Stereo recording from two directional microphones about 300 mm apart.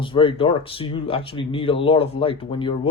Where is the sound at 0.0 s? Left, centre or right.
Centre.